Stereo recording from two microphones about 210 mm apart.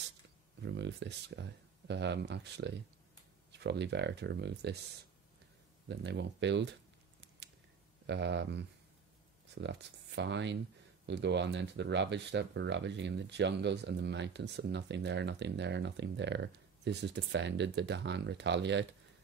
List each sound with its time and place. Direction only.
0.6 s speech: 55° right (ahead or behind)
5.9 s speech: 55° right (ahead or behind)
8.1 s speech: 55° right (ahead or behind)